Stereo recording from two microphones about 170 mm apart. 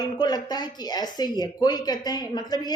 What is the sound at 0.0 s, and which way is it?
A woman's voice, 25° left (ahead or behind).